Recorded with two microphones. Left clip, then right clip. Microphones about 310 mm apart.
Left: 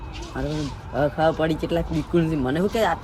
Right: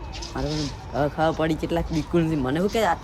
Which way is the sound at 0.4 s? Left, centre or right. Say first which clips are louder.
Even; centre.